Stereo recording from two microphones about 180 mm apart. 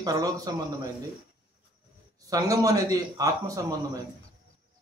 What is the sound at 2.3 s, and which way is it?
Speech, 20° right (ahead or behind).